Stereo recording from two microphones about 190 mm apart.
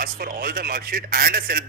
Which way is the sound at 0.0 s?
50° right (ahead or behind).